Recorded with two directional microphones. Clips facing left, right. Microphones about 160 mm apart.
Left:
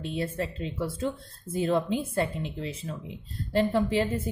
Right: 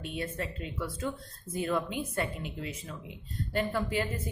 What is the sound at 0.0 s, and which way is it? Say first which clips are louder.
Speech: left 5 dB; 30° left (ahead or behind).